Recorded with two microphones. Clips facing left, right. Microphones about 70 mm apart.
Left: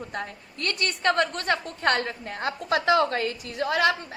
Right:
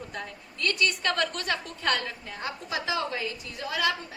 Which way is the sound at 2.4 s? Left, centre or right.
Left.